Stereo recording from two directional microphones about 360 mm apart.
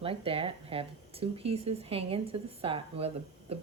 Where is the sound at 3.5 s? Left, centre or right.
Centre.